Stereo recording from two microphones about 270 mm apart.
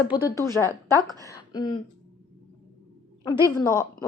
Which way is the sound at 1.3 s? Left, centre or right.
Centre.